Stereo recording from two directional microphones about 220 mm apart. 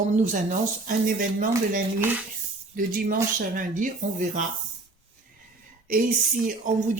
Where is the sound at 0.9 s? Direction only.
40° right (ahead or behind).